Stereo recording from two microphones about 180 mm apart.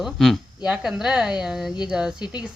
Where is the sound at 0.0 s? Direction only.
Centre (ahead or behind).